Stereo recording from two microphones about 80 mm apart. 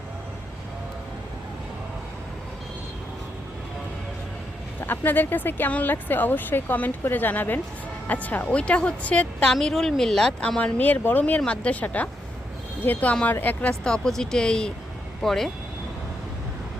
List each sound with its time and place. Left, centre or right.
4.8 s speech: left
9.5 s speech: centre
13.8 s speech: centre